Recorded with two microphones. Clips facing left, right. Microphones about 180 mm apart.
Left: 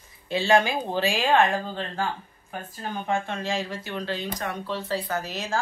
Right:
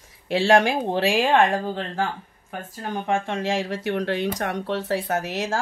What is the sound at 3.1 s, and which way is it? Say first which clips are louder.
Speech: right 4 dB; 85° right.